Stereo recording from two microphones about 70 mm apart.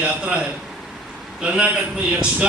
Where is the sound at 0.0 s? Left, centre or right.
Centre.